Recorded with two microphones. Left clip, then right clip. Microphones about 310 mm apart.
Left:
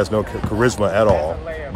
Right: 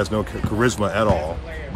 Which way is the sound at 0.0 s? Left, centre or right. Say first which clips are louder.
Left 4 dB; centre.